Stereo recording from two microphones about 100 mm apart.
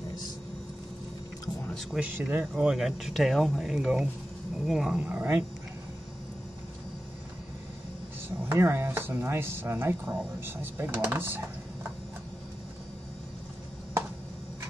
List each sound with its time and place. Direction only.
1.7 s speech: centre (ahead or behind)
2.0 s speech: 15° right (ahead or behind)
2.5 s speech: 5° right (ahead or behind)
8.5 s speech: 25° right (ahead or behind)